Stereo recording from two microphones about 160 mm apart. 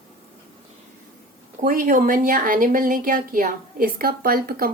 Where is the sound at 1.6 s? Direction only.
60° right (ahead or behind).